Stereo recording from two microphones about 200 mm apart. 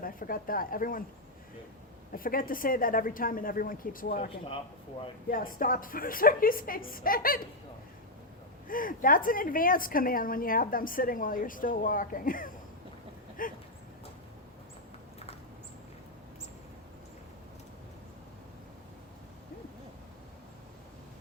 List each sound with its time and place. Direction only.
0.0 s speech: 45° left (ahead or behind)
2.1 s a woman's voice: 45° left (ahead or behind)
5.3 s a woman's voice: 45° left (ahead or behind)
8.6 s a woman's voice: 45° left (ahead or behind)